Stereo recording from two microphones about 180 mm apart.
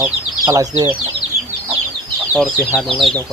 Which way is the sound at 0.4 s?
20° right (ahead or behind).